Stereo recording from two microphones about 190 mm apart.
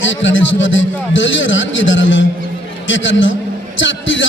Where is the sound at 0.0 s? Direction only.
80° left.